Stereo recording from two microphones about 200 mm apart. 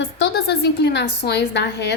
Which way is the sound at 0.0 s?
60° left (ahead or behind).